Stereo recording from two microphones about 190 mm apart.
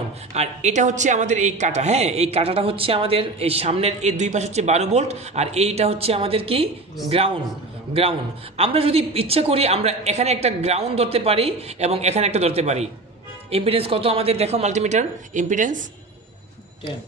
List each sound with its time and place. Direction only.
0.3 s a woman's voice: 35° right (ahead or behind)
8.5 s a woman's voice: 30° right (ahead or behind)